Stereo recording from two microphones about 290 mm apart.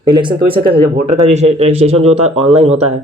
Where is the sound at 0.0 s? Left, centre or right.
Centre.